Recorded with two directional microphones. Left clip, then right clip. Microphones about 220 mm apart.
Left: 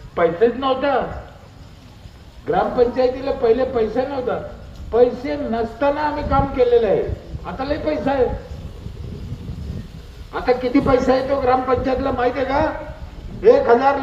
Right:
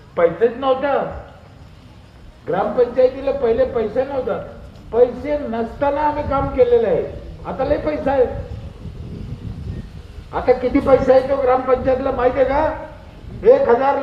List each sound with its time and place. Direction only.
0.1 s a man's voice: 45° left (ahead or behind)
2.5 s a man's voice: 45° left (ahead or behind)
10.3 s a man's voice: 45° left (ahead or behind)